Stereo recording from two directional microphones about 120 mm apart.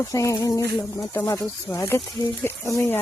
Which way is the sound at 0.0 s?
25° left (ahead or behind).